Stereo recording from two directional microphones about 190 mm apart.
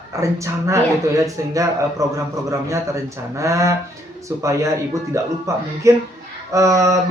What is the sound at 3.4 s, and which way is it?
Speech, 15° right (ahead or behind).